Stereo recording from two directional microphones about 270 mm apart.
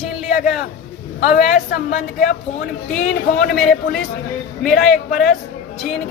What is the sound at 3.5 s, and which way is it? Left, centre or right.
Speech, centre.